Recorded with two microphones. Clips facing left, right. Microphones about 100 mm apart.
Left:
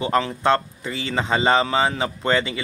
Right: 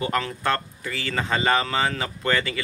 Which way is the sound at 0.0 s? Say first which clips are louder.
Left 5 dB; 25° left (ahead or behind).